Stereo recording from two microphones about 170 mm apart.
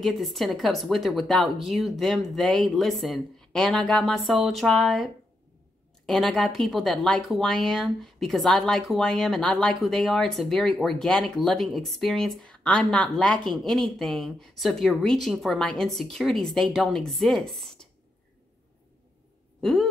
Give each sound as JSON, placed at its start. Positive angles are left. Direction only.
{"t": 0.0, "sound": "speech", "side_deg": 0}
{"t": 19.6, "sound": "owl", "side_deg": 0}